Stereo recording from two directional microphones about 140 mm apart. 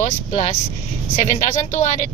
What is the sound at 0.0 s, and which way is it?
Speech, 55° left (ahead or behind).